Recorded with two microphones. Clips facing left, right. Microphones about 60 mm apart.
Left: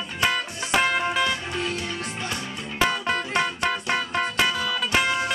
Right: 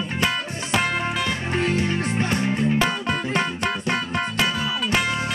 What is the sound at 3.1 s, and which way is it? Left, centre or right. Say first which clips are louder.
Music: right 1 dB; right.